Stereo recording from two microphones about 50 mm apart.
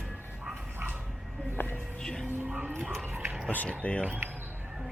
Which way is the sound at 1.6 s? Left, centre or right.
Left.